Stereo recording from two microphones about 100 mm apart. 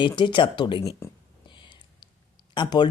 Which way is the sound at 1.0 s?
30° left (ahead or behind).